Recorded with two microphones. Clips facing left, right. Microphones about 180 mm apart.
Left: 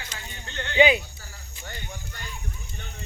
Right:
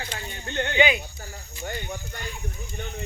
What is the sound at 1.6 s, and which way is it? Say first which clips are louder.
Speech: right 7 dB; 45° right (ahead or behind).